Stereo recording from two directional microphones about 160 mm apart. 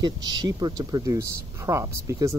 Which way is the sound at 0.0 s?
25° right (ahead or behind).